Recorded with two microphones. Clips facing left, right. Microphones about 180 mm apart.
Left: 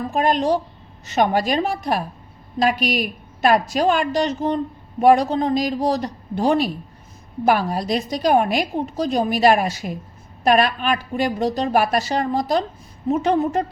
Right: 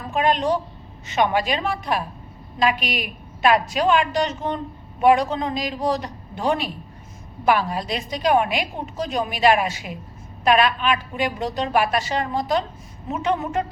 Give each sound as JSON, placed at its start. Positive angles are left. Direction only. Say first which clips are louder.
{"t": 0.1, "sound": "a woman's voice", "louder": "left 1 dB", "side_deg": 40}